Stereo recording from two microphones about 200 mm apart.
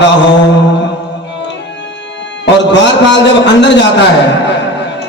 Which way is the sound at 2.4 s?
60° left (ahead or behind).